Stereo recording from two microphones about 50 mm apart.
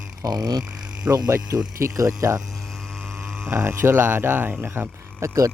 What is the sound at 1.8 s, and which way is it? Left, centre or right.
Speech, right.